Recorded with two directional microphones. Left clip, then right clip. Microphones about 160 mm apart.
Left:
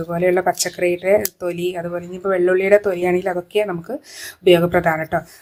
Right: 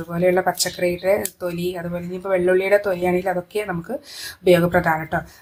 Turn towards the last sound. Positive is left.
turn(degrees=30)  # may be behind; listen again after turning